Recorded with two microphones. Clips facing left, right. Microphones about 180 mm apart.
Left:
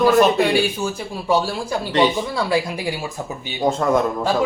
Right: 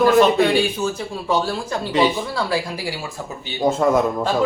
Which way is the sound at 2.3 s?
20° left (ahead or behind).